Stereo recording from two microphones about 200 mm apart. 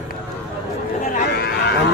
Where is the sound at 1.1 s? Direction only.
55° left (ahead or behind).